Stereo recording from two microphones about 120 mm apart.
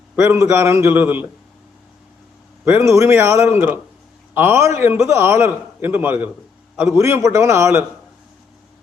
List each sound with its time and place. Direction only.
0.2 s a man's voice: 20° right (ahead or behind)
2.6 s a man's voice: 20° right (ahead or behind)